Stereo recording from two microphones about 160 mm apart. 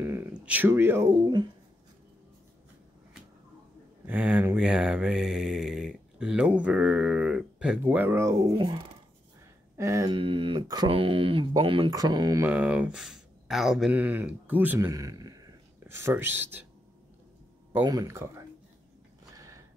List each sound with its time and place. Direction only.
0.0 s speech: 15° right (ahead or behind)
4.0 s mantra: 10° right (ahead or behind)
7.8 s speech: 15° right (ahead or behind)
8.5 s speech: 30° right (ahead or behind)
9.8 s speech: 20° right (ahead or behind)
10.1 s speech: 30° right (ahead or behind)
11.9 s speech: 25° right (ahead or behind)
12.4 s speech: 10° right (ahead or behind)
14.9 s speech: 20° right (ahead or behind)
17.8 s speech: 20° right (ahead or behind)
19.3 s a sound: 20° right (ahead or behind)